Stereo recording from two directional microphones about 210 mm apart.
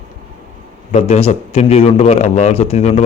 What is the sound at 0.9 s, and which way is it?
Speech, 30° left (ahead or behind).